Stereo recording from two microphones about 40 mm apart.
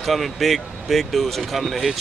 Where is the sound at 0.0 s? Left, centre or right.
Centre.